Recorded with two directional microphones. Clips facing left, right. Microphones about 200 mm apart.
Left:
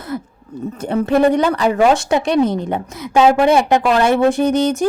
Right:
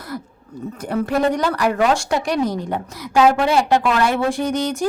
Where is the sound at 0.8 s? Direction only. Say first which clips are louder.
Left 5 dB; 25° left (ahead or behind).